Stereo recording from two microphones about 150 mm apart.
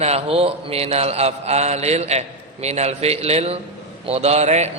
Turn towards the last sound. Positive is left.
turn(degrees=-45)  # may be behind; listen again after turning